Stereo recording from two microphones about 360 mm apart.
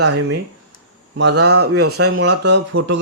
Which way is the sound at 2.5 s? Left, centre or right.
Right.